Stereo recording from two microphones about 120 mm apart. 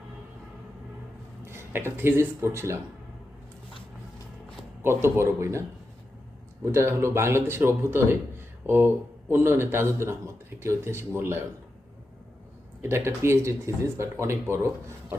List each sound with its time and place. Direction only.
1.5 s speech: 20° right (ahead or behind)
4.8 s a man's voice: 20° right (ahead or behind)
6.7 s a man's voice: 20° right (ahead or behind)
12.8 s a man's voice: 20° right (ahead or behind)